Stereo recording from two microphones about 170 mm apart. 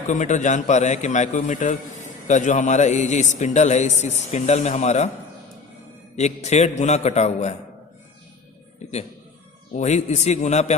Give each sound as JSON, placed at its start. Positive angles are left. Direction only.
{"t": 0.1, "sound": "a man's voice", "side_deg": 45}
{"t": 6.1, "sound": "a man's voice", "side_deg": 40}
{"t": 9.7, "sound": "a man's voice", "side_deg": 45}